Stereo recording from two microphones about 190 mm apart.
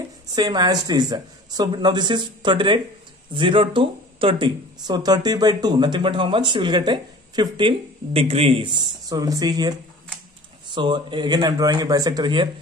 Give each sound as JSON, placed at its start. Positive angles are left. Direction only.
{"t": 0.3, "sound": "speech", "side_deg": -20}